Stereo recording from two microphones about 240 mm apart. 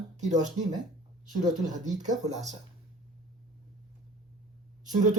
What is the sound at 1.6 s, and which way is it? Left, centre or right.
Speech, right.